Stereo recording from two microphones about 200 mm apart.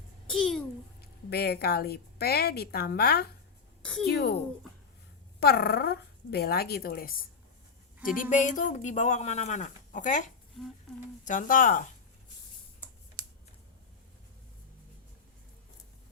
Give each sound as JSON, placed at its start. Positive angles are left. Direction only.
{"t": 0.3, "sound": "babbling", "side_deg": 0}
{"t": 1.0, "sound": "speech", "side_deg": 55}
{"t": 5.4, "sound": "speech", "side_deg": 50}
{"t": 11.3, "sound": "speech", "side_deg": 40}